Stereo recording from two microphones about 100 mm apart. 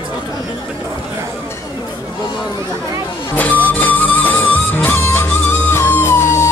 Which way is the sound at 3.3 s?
15° left (ahead or behind).